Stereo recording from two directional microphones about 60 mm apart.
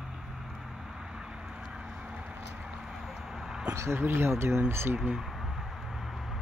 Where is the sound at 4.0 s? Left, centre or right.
Right.